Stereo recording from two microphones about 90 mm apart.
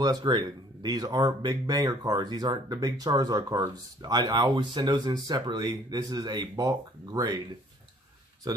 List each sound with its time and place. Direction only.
0.0 s speech: 50° right (ahead or behind)